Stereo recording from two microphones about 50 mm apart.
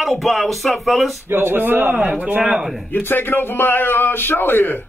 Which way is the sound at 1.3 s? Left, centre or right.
Right.